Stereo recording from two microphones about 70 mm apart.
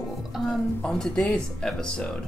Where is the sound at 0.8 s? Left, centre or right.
Centre.